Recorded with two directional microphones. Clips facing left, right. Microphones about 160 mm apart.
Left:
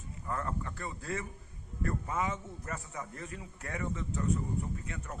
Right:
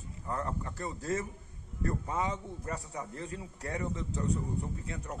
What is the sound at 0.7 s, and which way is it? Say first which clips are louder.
A man's voice: right 4 dB; 40° right (ahead or behind).